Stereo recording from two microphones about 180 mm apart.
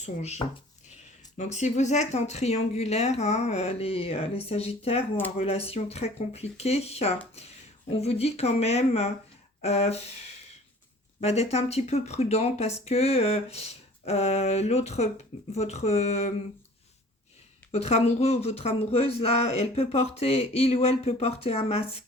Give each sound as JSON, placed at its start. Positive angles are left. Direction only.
{"t": 0.0, "sound": "speech", "side_deg": 40}
{"t": 11.2, "sound": "speech", "side_deg": 35}
{"t": 17.7, "sound": "speech", "side_deg": 40}